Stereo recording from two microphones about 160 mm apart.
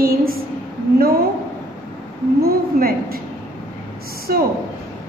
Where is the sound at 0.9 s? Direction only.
70° right (ahead or behind).